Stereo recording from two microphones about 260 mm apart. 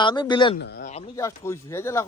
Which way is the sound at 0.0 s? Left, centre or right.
Centre.